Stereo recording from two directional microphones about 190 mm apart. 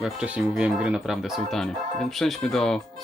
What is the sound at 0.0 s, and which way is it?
Speech, 5° right (ahead or behind).